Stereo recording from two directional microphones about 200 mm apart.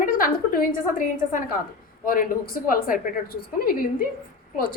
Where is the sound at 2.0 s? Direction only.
45° left (ahead or behind).